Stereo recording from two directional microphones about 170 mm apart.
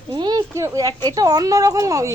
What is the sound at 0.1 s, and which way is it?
A woman's voice, 25° right (ahead or behind).